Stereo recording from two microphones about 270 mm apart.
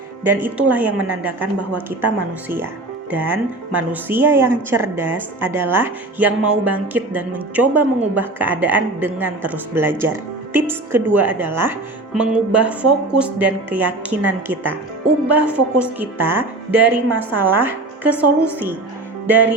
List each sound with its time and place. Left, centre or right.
0.3 s a woman's voice: centre
3.1 s a woman's voice: centre